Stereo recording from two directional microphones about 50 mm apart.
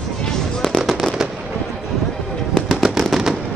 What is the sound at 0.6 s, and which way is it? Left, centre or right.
Fireworks, centre.